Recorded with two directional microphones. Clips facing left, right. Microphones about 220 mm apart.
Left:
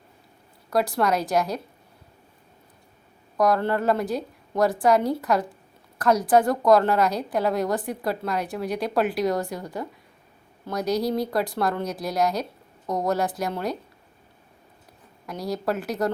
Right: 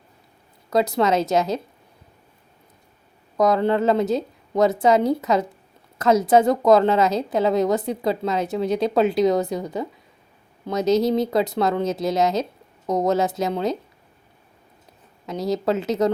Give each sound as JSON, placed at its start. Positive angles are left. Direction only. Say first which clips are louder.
{"t": 0.7, "sound": "a woman's voice", "louder": "right 3 dB", "side_deg": -20}
{"t": 3.3, "sound": "a woman's voice", "louder": "right 3 dB", "side_deg": -20}
{"t": 15.3, "sound": "a woman's voice", "louder": "right 5 dB", "side_deg": -20}